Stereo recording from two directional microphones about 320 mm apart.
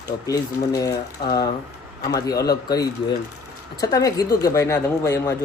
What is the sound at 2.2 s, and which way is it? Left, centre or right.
Speech, centre.